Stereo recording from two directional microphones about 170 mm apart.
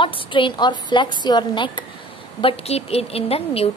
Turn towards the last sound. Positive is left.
turn(degrees=35)  # may be behind; listen again after turning